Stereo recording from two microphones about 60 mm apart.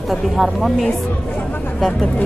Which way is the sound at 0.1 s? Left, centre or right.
Centre.